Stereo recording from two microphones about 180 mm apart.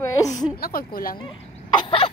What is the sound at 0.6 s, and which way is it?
Speech, 55° left (ahead or behind).